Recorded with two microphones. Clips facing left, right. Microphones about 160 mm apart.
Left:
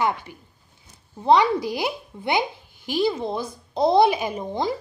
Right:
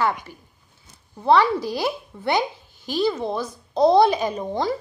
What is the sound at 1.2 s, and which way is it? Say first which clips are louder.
Speech: even; 15° left (ahead or behind).